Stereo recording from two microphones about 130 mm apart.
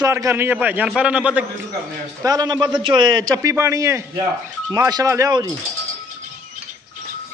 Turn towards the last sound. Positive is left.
turn(degrees=-25)  # may be behind; listen again after turning